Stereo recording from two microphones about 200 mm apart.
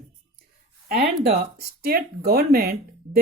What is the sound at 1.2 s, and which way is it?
Speech, 50° right (ahead or behind).